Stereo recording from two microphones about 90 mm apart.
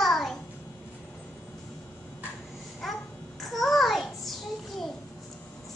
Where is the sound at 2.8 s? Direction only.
5° left (ahead or behind).